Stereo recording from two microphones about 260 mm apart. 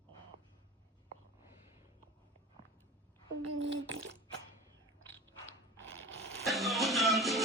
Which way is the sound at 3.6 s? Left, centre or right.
Right.